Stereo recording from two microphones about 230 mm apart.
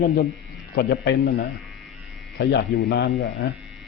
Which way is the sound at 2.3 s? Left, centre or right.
Left.